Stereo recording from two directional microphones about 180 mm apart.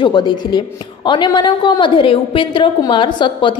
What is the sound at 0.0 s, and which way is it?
A woman's voice, 25° left (ahead or behind).